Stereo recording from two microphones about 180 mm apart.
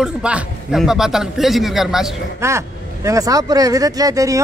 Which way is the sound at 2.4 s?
15° right (ahead or behind).